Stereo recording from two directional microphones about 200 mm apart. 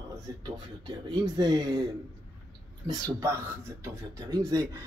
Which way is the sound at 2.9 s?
20° right (ahead or behind).